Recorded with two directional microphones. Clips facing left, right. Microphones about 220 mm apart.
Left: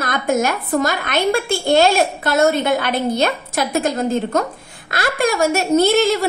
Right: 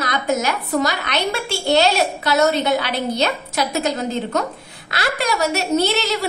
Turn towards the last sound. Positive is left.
turn(degrees=50)  # may be behind; listen again after turning